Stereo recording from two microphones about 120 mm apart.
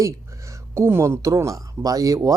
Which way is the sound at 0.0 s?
25° right (ahead or behind).